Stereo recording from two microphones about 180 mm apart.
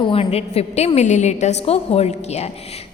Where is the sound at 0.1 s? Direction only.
35° left (ahead or behind).